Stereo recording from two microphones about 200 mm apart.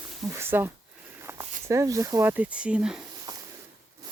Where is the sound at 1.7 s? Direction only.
15° right (ahead or behind).